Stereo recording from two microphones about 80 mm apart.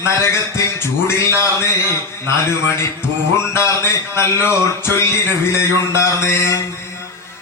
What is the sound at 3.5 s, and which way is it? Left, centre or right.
A man's voice, left.